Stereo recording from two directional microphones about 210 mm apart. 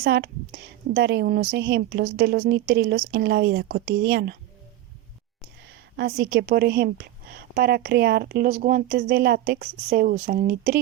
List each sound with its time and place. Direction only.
0.0 s a woman's voice: 50° right (ahead or behind)
5.6 s a woman's voice: 50° right (ahead or behind)